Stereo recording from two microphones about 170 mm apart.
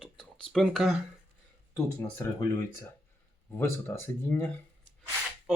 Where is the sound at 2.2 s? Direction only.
15° left (ahead or behind).